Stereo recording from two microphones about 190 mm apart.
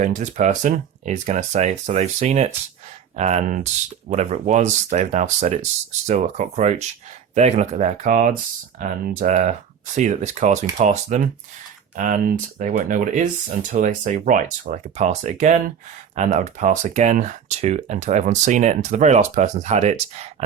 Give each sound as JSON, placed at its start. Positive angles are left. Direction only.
{"t": 0.0, "sound": "speech", "side_deg": -40}